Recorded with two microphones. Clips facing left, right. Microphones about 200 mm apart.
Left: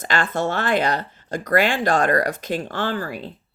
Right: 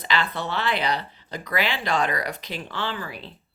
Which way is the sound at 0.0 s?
45° left (ahead or behind).